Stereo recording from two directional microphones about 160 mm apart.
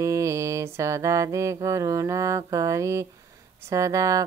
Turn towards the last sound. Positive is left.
turn(degrees=-20)  # may be behind; listen again after turning